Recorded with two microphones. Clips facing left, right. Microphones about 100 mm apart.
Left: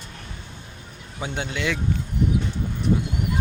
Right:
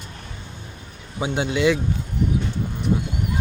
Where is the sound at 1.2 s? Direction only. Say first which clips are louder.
Right 7 dB; 15° right (ahead or behind).